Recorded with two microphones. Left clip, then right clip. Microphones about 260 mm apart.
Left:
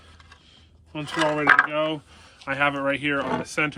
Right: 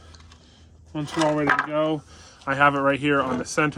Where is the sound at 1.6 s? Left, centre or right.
Centre.